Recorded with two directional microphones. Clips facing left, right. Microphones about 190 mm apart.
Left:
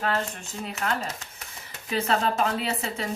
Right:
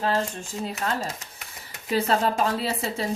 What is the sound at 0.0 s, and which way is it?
Speech, 30° right (ahead or behind).